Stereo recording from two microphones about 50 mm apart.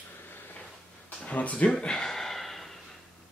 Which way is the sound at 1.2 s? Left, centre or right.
Left.